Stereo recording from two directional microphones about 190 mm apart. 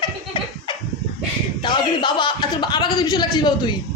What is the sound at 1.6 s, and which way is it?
A man's voice, 25° left (ahead or behind).